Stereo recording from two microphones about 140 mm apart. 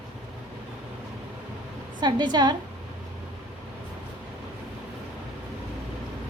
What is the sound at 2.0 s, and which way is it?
Speech, 30° right (ahead or behind).